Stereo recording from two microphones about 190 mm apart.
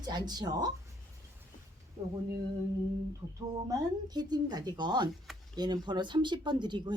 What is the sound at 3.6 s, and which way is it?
Speech, 20° right (ahead or behind).